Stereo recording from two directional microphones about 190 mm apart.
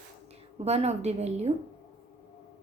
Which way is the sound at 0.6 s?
35° right (ahead or behind).